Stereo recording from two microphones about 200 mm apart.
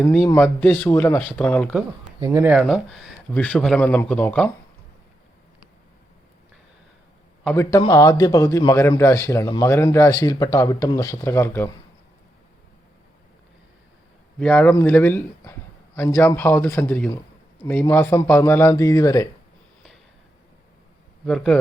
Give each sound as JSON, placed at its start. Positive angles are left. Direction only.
{"t": 0.0, "sound": "a man's voice", "side_deg": 0}
{"t": 0.3, "sound": "a man's voice", "side_deg": 10}
{"t": 2.2, "sound": "a man's voice", "side_deg": -10}
{"t": 7.4, "sound": "a man's voice", "side_deg": 15}
{"t": 14.3, "sound": "a man's voice", "side_deg": 5}
{"t": 21.2, "sound": "a man's voice", "side_deg": 5}